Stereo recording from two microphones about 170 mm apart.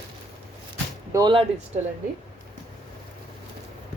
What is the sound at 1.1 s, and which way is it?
Speech, 20° right (ahead or behind).